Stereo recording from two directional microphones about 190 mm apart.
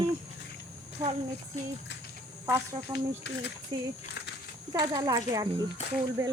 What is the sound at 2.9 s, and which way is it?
Speech, 20° right (ahead or behind).